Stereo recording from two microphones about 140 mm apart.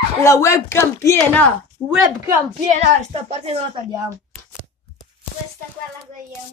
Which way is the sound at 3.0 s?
45° right (ahead or behind).